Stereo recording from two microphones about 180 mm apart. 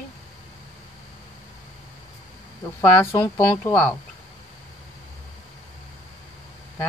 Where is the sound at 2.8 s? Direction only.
15° left (ahead or behind).